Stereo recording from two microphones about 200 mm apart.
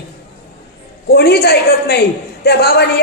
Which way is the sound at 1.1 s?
50° left (ahead or behind).